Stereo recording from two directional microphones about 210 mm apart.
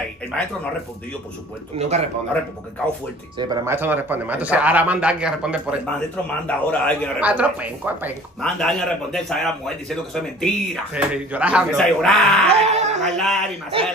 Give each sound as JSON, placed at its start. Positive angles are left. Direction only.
{"t": 1.8, "sound": "speech", "side_deg": -30}
{"t": 3.3, "sound": "a man's voice", "side_deg": -15}
{"t": 5.9, "sound": "a man's voice", "side_deg": 5}
{"t": 7.2, "sound": "a man's voice", "side_deg": -5}
{"t": 8.4, "sound": "speech", "side_deg": 5}
{"t": 12.4, "sound": "speech", "side_deg": -30}
{"t": 13.1, "sound": "speech", "side_deg": 0}
{"t": 13.7, "sound": "speech", "side_deg": -25}